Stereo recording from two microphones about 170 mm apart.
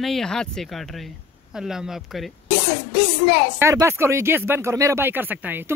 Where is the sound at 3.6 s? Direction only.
15° right (ahead or behind).